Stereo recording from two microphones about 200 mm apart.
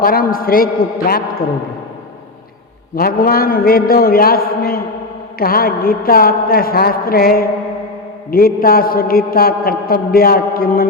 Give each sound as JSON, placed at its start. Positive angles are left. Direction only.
{"t": 0.0, "sound": "a man's voice", "side_deg": 45}
{"t": 2.9, "sound": "a man's voice", "side_deg": 45}